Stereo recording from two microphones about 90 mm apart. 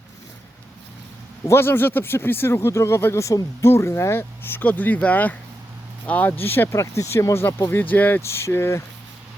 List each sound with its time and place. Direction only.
1.5 s speech: 25° left (ahead or behind)
7.7 s speech: 20° left (ahead or behind)
8.2 s speech: 30° left (ahead or behind)